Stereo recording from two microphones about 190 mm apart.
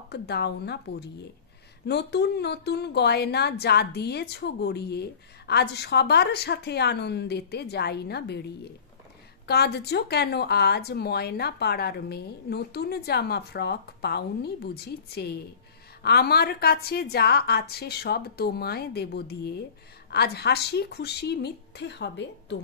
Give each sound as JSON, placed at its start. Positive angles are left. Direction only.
{"t": 0.1, "sound": "a woman's voice", "side_deg": 60}
{"t": 9.5, "sound": "a woman's voice", "side_deg": 60}